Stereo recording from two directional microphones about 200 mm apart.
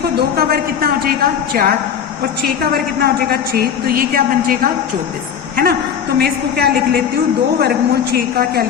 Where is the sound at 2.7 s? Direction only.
50° right (ahead or behind).